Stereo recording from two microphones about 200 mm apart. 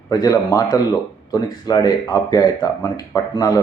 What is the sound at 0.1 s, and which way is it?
Speech, 20° left (ahead or behind).